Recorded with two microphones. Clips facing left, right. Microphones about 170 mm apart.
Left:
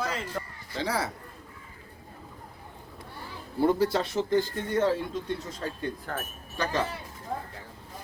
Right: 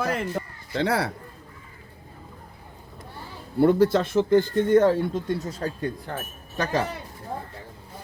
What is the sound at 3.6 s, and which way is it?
A man's voice, 60° right (ahead or behind).